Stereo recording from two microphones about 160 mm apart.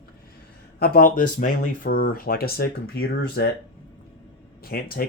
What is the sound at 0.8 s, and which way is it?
Speech, 60° left (ahead or behind).